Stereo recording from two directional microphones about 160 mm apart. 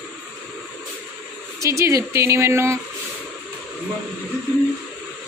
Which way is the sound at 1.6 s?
20° right (ahead or behind).